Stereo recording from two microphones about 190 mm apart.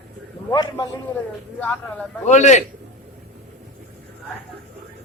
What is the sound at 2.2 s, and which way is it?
Speech, 40° left (ahead or behind).